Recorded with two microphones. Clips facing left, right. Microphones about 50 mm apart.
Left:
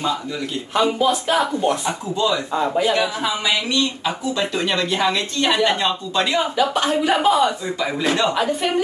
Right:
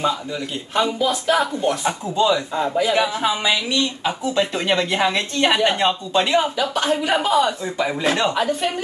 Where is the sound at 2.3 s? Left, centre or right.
Left.